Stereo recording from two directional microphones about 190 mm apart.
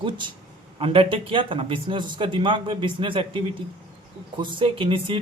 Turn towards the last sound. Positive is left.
turn(degrees=-25)  # may be behind; listen again after turning